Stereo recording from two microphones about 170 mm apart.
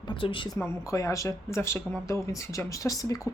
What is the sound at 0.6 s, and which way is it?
Speech, 20° left (ahead or behind).